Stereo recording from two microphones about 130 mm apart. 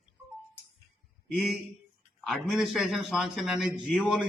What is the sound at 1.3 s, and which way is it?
A man's voice, centre (ahead or behind).